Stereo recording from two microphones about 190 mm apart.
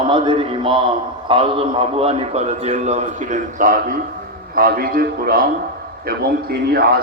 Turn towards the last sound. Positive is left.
turn(degrees=-55)  # may be behind; listen again after turning